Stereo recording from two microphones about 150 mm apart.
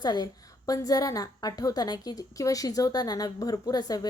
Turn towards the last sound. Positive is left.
turn(degrees=25)  # may be behind; listen again after turning